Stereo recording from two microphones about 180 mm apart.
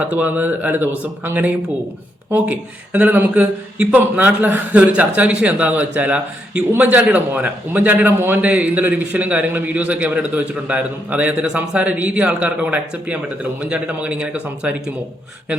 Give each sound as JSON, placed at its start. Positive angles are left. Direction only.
{"t": 0.0, "sound": "speech", "side_deg": -10}